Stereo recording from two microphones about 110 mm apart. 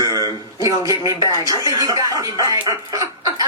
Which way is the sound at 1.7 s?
35° right (ahead or behind).